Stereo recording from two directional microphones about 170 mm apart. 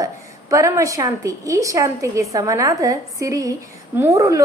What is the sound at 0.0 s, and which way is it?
A woman's voice, 20° right (ahead or behind).